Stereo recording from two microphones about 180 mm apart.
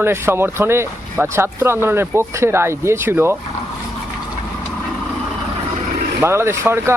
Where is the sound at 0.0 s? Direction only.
15° right (ahead or behind).